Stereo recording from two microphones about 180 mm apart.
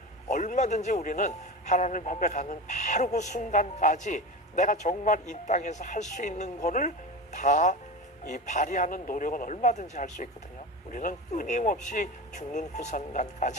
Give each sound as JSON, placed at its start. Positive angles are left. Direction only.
{"t": 0.3, "sound": "a man's voice", "side_deg": 45}